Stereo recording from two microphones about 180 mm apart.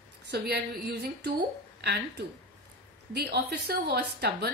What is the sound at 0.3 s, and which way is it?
A woman's voice, 65° right (ahead or behind).